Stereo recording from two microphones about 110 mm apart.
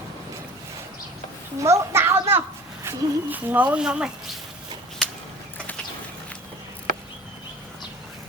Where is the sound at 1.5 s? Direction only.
25° right (ahead or behind).